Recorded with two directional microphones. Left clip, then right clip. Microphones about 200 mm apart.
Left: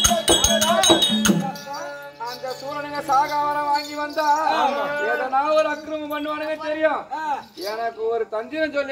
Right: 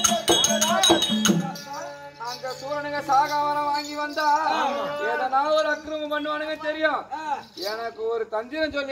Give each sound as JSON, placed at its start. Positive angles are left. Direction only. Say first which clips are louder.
{"t": 0.0, "sound": "music", "louder": "left 3 dB", "side_deg": 5}
{"t": 2.4, "sound": "a sound", "louder": "right 1 dB", "side_deg": -10}
{"t": 4.5, "sound": "livestock", "louder": "left 4 dB", "side_deg": 15}
{"t": 5.3, "sound": "a man's voice", "louder": "left 2 dB", "side_deg": -20}